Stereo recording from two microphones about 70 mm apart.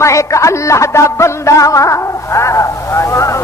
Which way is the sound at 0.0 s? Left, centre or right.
Left.